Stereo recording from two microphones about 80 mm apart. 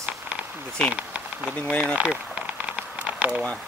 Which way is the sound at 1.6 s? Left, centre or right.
Centre.